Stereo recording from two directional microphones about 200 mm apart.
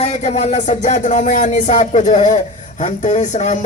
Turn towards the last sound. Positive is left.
turn(degrees=35)  # may be behind; listen again after turning